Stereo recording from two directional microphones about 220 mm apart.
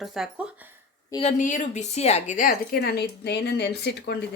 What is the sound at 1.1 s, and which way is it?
A woman's voice, 30° left (ahead or behind).